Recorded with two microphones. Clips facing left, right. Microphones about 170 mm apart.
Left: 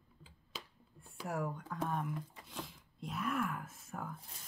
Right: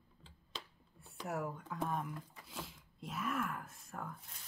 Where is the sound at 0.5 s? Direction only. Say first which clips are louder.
Even; 5° left (ahead or behind).